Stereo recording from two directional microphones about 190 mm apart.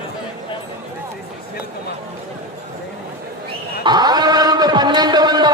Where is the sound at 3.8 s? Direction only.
20° right (ahead or behind).